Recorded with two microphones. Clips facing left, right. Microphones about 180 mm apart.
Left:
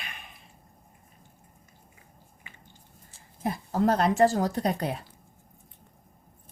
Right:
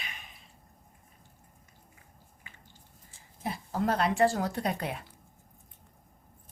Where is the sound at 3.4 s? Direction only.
40° left (ahead or behind).